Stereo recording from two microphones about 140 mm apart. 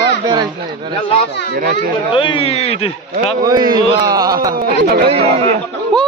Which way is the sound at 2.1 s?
35° left (ahead or behind).